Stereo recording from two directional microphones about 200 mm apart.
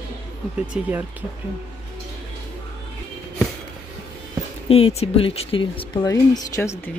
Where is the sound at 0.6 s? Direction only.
10° right (ahead or behind).